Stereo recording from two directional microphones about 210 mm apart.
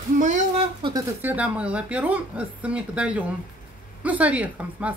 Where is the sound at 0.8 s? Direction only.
25° right (ahead or behind).